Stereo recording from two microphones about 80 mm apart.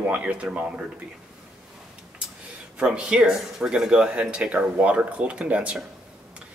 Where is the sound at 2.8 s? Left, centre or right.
Centre.